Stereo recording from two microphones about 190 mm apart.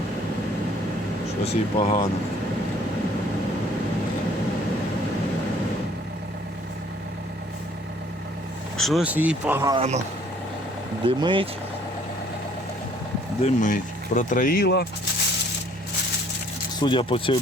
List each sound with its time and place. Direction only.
1.5 s speech: 30° left (ahead or behind)
8.8 s speech: centre (ahead or behind)
9.7 s speech: 35° right (ahead or behind)
11.0 s speech: 25° right (ahead or behind)
13.4 s speech: 45° left (ahead or behind); by 14.8 s 60° left (ahead or behind)
16.8 s speech: 25° left (ahead or behind)